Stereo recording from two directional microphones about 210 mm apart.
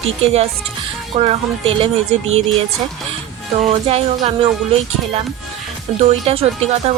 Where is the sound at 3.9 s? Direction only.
30° right (ahead or behind).